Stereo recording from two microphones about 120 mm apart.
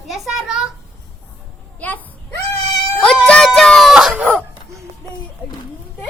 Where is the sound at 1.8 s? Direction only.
10° left (ahead or behind).